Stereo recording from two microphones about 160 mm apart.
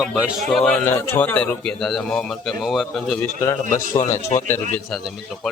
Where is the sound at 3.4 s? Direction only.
15° left (ahead or behind).